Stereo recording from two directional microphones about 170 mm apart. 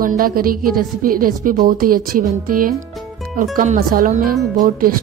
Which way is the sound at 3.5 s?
50° right (ahead or behind).